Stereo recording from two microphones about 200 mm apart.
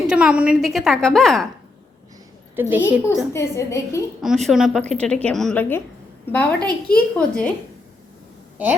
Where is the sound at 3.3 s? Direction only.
15° left (ahead or behind).